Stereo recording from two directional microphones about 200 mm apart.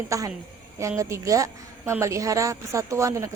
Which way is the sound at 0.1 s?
15° right (ahead or behind).